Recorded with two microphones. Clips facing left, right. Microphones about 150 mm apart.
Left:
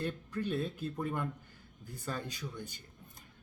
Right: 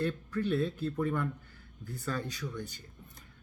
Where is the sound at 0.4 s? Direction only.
15° left (ahead or behind).